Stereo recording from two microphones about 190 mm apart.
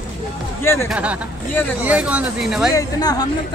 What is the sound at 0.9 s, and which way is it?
Speech, 5° right (ahead or behind).